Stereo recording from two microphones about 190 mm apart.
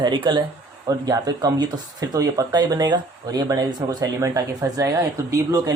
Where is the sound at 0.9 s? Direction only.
20° right (ahead or behind).